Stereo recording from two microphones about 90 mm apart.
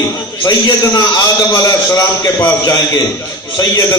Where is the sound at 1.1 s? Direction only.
40° left (ahead or behind).